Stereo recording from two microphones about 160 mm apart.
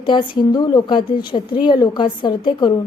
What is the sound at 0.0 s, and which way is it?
A woman's voice, 30° left (ahead or behind).